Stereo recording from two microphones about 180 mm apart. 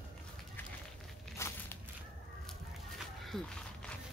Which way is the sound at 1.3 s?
15° left (ahead or behind).